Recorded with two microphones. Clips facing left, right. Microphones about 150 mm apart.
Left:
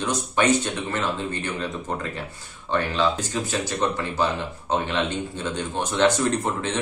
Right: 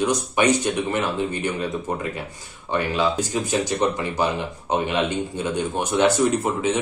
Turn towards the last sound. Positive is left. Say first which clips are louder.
# right 3 dB
turn(degrees=-10)  # may be behind; listen again after turning